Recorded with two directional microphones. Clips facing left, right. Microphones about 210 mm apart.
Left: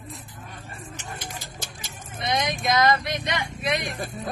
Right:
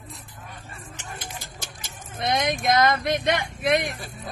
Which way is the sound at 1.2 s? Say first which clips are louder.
Left 1 dB; 50° right (ahead or behind).